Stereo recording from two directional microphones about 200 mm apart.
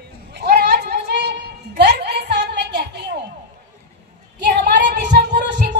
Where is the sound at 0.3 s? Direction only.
55° right (ahead or behind).